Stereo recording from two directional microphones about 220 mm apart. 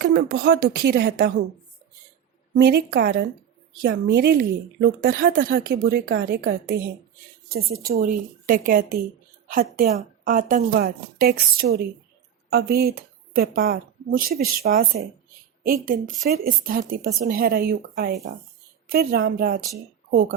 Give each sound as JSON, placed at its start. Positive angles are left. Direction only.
{"t": 0.0, "sound": "a woman's voice", "side_deg": -45}
{"t": 2.6, "sound": "a woman's voice", "side_deg": -45}